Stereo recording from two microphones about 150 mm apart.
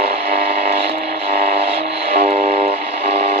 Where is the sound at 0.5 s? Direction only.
55° right (ahead or behind).